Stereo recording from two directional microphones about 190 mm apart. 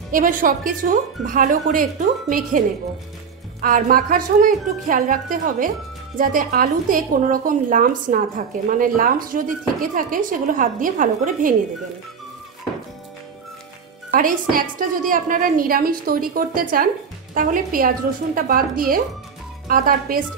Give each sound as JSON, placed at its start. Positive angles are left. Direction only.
{"t": 0.1, "sound": "speech", "side_deg": -45}
{"t": 3.6, "sound": "speech", "side_deg": -45}
{"t": 14.1, "sound": "speech", "side_deg": -45}